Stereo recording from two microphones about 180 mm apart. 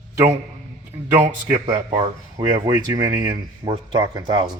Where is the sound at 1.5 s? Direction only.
35° right (ahead or behind).